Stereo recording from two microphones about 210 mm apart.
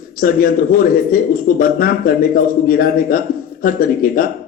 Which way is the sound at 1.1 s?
40° left (ahead or behind).